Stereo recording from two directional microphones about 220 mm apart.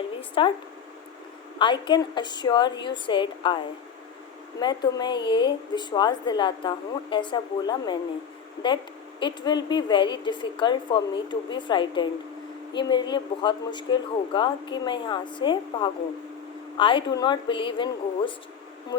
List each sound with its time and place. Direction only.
0.2 s speech: 25° left (ahead or behind)
1.5 s a woman's voice: 20° left (ahead or behind)
4.6 s a woman's voice: 20° left (ahead or behind)
9.2 s a woman's voice: 20° left (ahead or behind)